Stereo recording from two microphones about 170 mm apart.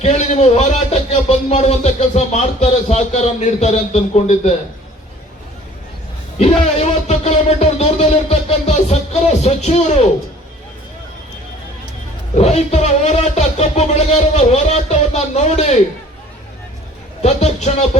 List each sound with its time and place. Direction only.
0.0 s speech: 40° left (ahead or behind)
6.4 s music: 40° left (ahead or behind)
9.4 s speech: 40° left (ahead or behind)
12.4 s speech: 40° left (ahead or behind)
17.2 s speech: 40° left (ahead or behind)